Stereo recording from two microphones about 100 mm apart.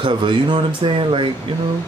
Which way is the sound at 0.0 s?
50° right (ahead or behind).